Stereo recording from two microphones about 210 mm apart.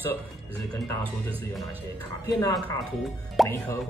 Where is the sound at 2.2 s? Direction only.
15° left (ahead or behind).